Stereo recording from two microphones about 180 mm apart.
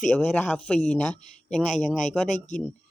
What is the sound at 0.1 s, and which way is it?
Speech, 10° left (ahead or behind).